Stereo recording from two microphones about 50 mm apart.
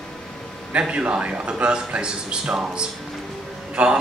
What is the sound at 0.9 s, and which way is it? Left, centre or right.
Speech, right.